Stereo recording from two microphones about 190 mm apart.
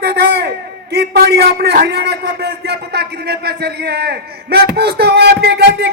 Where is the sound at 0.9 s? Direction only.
55° right (ahead or behind).